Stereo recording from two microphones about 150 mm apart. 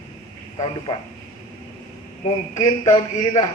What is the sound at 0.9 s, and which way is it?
Speech, 45° left (ahead or behind).